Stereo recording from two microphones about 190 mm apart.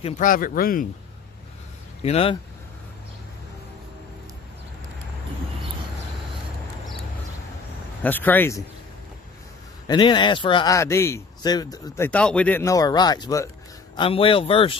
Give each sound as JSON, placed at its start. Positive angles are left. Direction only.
{"t": 0.2, "sound": "speech", "side_deg": 45}
{"t": 2.0, "sound": "speech", "side_deg": 30}
{"t": 8.0, "sound": "speech", "side_deg": 10}
{"t": 9.8, "sound": "speech", "side_deg": 25}
{"t": 12.1, "sound": "speech", "side_deg": 5}